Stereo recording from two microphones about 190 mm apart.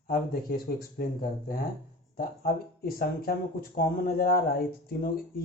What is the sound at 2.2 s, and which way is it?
Speech, 50° left (ahead or behind).